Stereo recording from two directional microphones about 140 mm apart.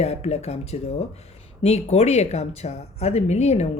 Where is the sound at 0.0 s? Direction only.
50° left (ahead or behind).